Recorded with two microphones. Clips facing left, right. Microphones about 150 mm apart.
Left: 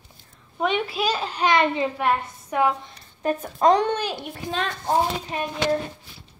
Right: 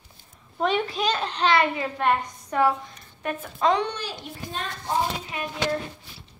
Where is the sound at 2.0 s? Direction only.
5° left (ahead or behind).